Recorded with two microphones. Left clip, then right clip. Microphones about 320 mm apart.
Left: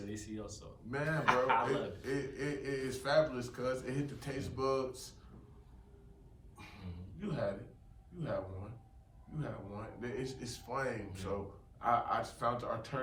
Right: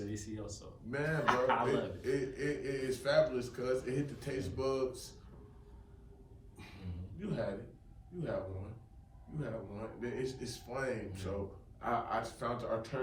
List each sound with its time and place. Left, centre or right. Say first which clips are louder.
0.1 s speech: right 1 dB; centre
0.9 s a man's voice: right 1 dB; centre
1.1 s speech: left 1 dB; centre
1.6 s a man's voice: right 2 dB; centre
7.2 s a man's voice: right 1 dB; centre
9.4 s a man's voice: right 2 dB; centre